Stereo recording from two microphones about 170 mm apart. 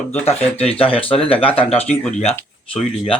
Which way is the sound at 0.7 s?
35° left (ahead or behind).